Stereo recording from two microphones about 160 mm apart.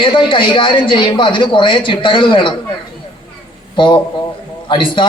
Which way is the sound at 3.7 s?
30° left (ahead or behind).